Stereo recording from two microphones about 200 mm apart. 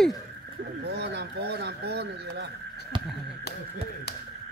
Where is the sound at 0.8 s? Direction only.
55° right (ahead or behind).